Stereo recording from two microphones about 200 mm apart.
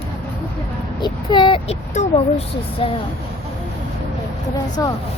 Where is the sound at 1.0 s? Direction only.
20° left (ahead or behind).